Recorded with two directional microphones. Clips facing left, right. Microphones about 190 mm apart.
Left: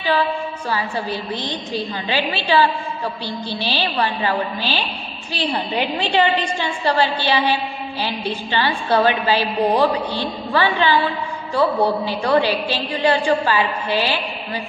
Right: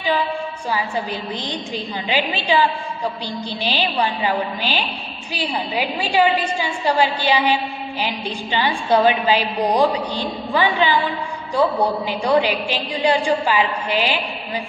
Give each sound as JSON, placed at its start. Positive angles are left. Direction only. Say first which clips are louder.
{"t": 0.7, "sound": "a woman's voice", "louder": "even", "side_deg": -15}